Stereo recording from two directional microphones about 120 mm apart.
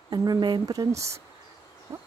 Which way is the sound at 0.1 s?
35° right (ahead or behind).